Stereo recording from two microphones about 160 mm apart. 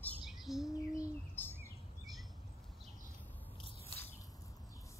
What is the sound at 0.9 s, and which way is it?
Bird, 15° left (ahead or behind).